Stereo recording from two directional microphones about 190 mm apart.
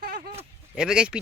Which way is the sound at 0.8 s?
5° right (ahead or behind).